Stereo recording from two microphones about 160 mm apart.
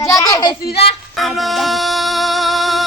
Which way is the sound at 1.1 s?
Centre (ahead or behind).